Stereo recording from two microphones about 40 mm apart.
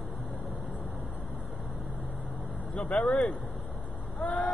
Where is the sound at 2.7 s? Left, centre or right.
Left.